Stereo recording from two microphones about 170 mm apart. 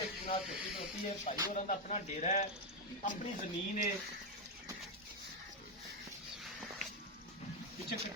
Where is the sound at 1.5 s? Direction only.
45° left (ahead or behind).